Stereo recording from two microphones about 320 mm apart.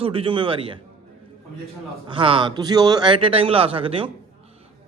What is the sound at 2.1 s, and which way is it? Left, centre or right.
A man's voice, centre.